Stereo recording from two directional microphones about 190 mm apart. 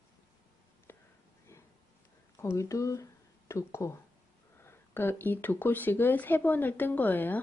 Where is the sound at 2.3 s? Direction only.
15° left (ahead or behind).